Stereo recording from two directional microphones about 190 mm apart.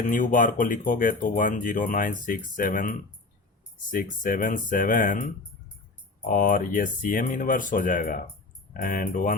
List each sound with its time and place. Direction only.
0.1 s speech: 45° left (ahead or behind)